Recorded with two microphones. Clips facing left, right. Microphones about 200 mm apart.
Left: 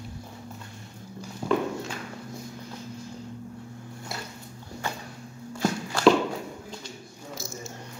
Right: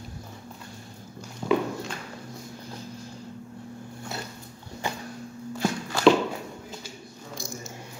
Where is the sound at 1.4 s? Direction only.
10° left (ahead or behind).